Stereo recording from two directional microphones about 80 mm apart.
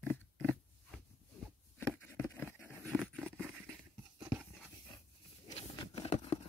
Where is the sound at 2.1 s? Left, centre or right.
Left.